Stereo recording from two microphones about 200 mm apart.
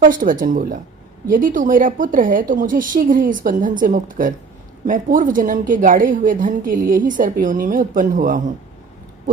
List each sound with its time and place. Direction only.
0.0 s a woman's voice: 40° right (ahead or behind)